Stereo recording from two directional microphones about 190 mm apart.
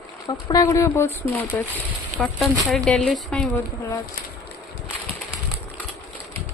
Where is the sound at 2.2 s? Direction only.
Centre (ahead or behind).